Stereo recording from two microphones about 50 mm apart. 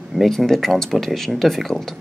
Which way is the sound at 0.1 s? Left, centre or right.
Centre.